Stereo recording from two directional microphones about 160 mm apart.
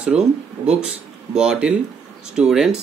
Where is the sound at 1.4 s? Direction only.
5° right (ahead or behind).